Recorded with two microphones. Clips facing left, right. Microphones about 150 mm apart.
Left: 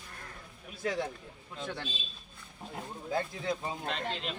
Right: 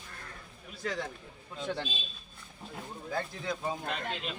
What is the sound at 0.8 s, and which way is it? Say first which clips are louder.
Speech: left 3 dB; 20° left (ahead or behind).